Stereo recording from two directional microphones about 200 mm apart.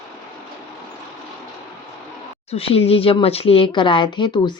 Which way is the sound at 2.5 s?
30° left (ahead or behind).